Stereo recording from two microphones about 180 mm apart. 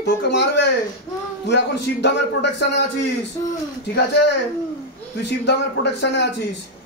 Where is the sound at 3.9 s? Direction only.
70° left (ahead or behind).